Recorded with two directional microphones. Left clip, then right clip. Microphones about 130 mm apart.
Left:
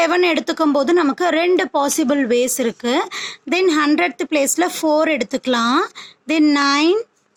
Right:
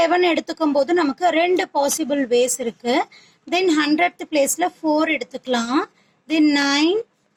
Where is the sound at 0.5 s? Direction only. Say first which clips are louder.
Left 4 dB; 25° left (ahead or behind).